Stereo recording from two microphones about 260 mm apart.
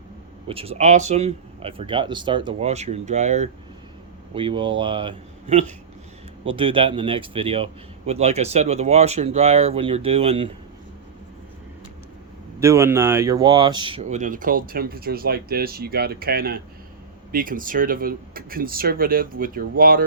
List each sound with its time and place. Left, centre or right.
0.4 s a man's voice: right
12.5 s speech: centre; by 20.1 s right